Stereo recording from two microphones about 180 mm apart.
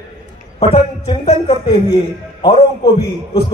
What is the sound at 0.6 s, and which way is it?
A man's voice, 30° left (ahead or behind).